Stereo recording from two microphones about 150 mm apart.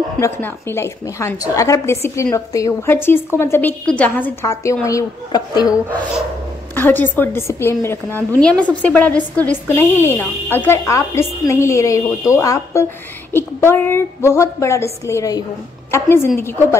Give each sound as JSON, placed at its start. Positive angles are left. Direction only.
{"t": 0.2, "sound": "a woman's voice", "side_deg": 15}
{"t": 6.7, "sound": "a woman's voice", "side_deg": 15}